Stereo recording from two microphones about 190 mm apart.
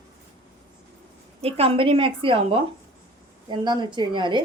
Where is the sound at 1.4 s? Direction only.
30° right (ahead or behind).